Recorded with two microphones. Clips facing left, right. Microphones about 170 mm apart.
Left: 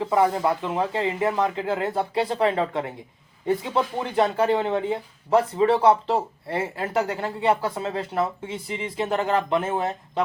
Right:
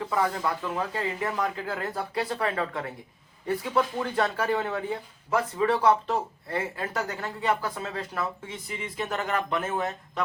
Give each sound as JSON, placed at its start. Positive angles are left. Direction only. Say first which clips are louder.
{"t": 0.0, "sound": "speech", "louder": "left 6 dB", "side_deg": 25}